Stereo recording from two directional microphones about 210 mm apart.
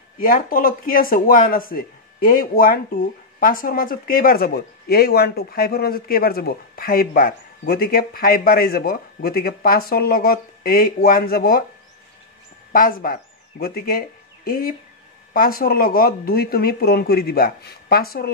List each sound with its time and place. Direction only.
0.2 s speech: 40° left (ahead or behind)
12.7 s speech: 45° left (ahead or behind)